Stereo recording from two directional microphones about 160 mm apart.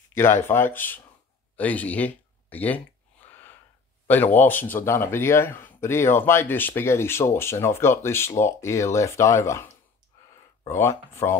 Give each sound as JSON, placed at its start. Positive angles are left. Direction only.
{"t": 0.1, "sound": "speech", "side_deg": 15}
{"t": 4.1, "sound": "speech", "side_deg": 10}
{"t": 10.7, "sound": "speech", "side_deg": 15}